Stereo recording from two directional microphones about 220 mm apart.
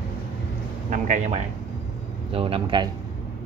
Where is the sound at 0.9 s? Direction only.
35° right (ahead or behind).